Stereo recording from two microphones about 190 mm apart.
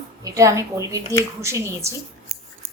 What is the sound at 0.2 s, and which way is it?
A woman's voice, 15° right (ahead or behind).